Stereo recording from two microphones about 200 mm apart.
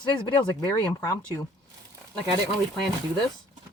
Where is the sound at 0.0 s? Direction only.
20° left (ahead or behind).